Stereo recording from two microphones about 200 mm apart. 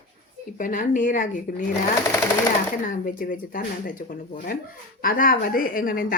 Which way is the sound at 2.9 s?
45° left (ahead or behind).